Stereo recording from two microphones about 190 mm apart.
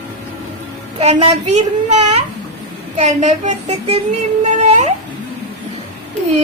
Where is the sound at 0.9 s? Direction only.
30° right (ahead or behind).